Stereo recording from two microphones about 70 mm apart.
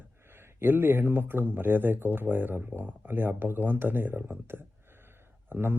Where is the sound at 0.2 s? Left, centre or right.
Right.